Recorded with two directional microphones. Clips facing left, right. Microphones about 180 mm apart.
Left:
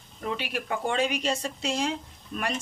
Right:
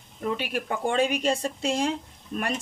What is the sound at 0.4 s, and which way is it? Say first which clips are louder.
A woman's voice: right 2 dB; 45° right (ahead or behind).